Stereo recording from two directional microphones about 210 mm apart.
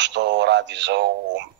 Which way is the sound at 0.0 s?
55° right (ahead or behind).